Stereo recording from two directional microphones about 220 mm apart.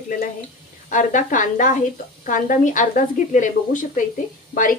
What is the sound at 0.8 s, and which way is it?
Speech, 35° left (ahead or behind).